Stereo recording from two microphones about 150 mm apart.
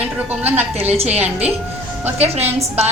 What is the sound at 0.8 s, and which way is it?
A woman's voice, 40° right (ahead or behind).